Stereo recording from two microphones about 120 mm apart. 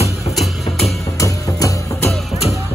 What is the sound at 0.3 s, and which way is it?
Music, centre (ahead or behind).